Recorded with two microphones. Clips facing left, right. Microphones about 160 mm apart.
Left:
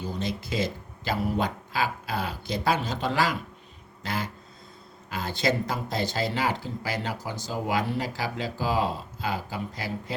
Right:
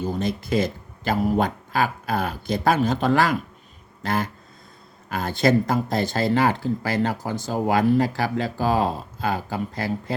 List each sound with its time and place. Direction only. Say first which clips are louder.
0.0 s speech: right 6 dB; 50° right (ahead or behind)